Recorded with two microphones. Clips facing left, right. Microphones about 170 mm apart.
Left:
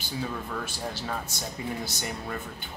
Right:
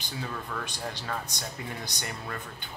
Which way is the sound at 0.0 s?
10° left (ahead or behind).